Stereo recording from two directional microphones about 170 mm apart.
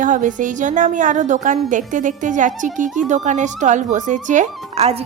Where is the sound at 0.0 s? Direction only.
50° right (ahead or behind).